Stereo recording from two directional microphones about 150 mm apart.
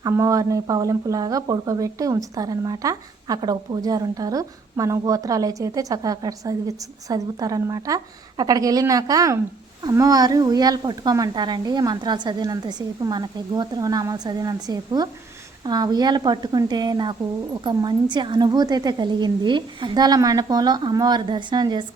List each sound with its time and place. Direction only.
0.0 s speech: 20° right (ahead or behind)